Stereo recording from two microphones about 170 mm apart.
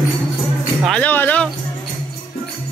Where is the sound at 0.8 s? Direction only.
5° left (ahead or behind).